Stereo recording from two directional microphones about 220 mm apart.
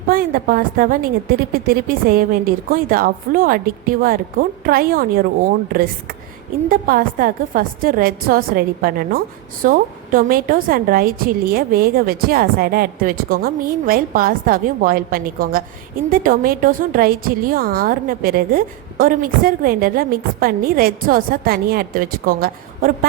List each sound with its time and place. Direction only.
0.1 s a woman's voice: 40° right (ahead or behind)
6.7 s a woman's voice: 40° right (ahead or behind)